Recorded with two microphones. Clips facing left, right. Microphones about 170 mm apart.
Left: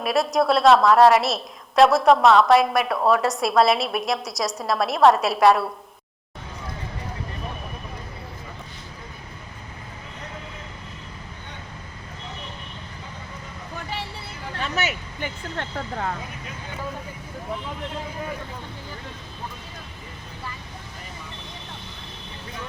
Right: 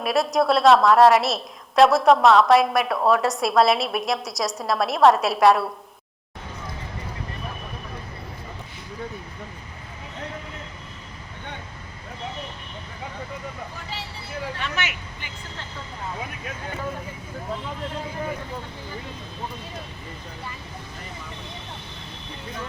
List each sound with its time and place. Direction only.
0.0 s a woman's voice: centre (ahead or behind)
14.8 s speech: 40° left (ahead or behind)
15.5 s speech: 75° left (ahead or behind)